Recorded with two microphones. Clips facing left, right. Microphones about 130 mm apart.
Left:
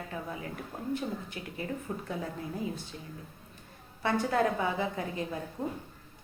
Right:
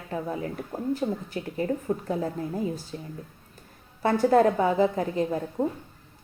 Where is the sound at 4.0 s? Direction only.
40° right (ahead or behind).